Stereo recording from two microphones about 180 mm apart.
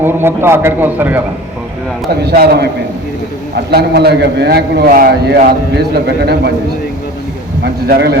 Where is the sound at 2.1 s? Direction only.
60° right (ahead or behind).